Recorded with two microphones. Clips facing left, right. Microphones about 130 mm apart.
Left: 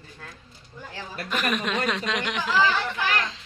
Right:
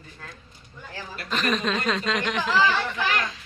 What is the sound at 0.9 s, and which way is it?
A woman's voice, 15° left (ahead or behind).